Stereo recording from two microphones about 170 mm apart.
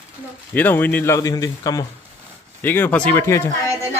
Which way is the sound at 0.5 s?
10° left (ahead or behind).